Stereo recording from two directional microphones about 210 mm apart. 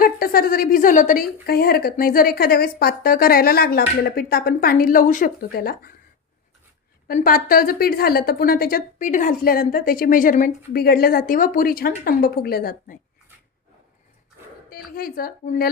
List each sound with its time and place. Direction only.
0.0 s a woman's voice: 45° left (ahead or behind)
7.1 s a woman's voice: 40° left (ahead or behind)
14.9 s a woman's voice: 45° left (ahead or behind)